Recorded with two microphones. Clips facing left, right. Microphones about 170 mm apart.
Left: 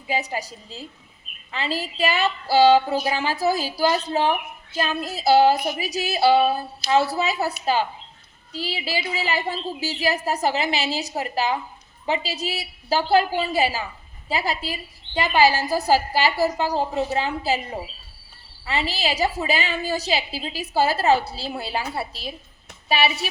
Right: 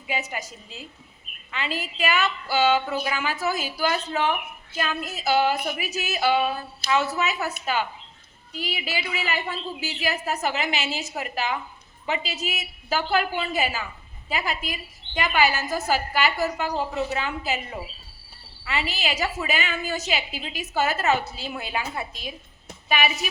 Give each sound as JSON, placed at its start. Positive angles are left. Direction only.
{"t": 0.1, "sound": "a woman's voice", "side_deg": 35}